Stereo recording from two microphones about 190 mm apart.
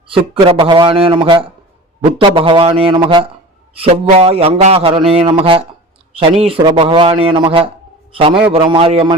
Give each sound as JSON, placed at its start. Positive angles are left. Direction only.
{"t": 0.1, "sound": "a man's voice", "side_deg": -30}